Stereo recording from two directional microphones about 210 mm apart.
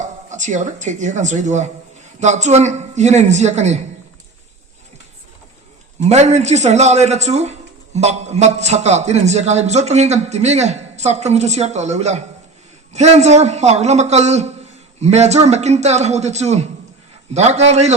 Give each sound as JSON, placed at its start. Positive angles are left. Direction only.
{"t": 0.0, "sound": "a man's voice", "side_deg": -35}
{"t": 6.0, "sound": "a man's voice", "side_deg": -30}